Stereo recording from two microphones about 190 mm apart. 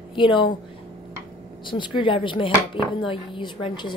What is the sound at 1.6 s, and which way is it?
Speech, 25° left (ahead or behind).